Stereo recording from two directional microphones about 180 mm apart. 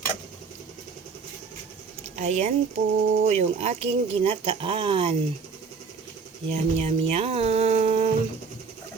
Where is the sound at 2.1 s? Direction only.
40° right (ahead or behind).